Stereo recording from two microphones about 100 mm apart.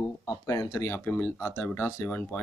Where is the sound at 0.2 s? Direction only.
35° left (ahead or behind).